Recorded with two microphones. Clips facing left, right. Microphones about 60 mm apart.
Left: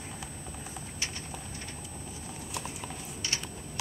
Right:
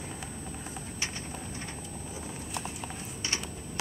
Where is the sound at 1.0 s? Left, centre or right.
Right.